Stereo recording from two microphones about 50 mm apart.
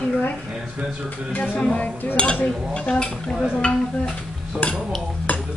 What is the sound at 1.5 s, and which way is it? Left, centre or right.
Mechanisms, left.